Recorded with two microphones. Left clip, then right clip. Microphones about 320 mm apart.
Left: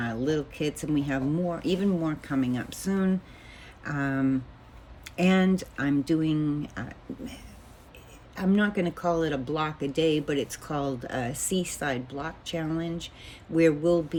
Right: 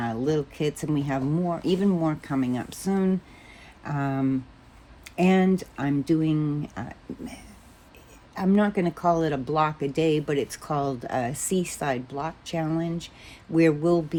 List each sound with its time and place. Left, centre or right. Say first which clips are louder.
0.0 s speech: right 2 dB; centre
8.4 s speech: right 3 dB; centre